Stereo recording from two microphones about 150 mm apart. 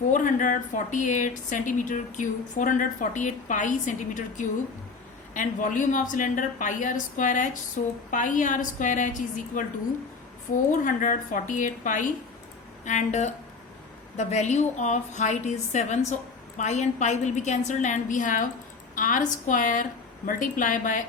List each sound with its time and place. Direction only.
0.1 s speech: 60° left (ahead or behind)
10.5 s a woman's voice: 60° left (ahead or behind)